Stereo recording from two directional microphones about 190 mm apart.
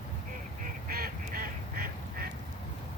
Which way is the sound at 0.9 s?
50° right (ahead or behind).